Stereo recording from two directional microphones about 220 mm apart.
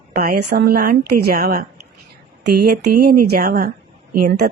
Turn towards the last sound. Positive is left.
turn(degrees=-45)  # may be behind; listen again after turning